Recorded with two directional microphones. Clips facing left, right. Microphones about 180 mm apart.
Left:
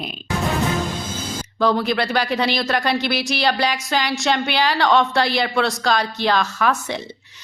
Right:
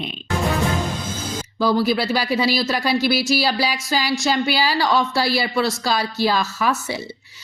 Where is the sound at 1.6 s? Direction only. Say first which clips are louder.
Even; 5° right (ahead or behind).